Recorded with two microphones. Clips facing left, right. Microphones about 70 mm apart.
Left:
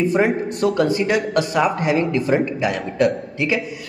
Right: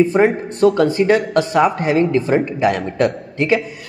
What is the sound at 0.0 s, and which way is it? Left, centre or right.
A man's voice, right.